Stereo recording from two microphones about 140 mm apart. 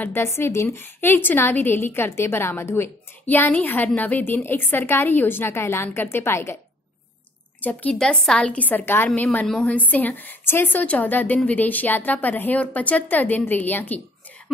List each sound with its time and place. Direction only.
0.0 s a woman's voice: 15° left (ahead or behind)
7.6 s a woman's voice: 10° left (ahead or behind)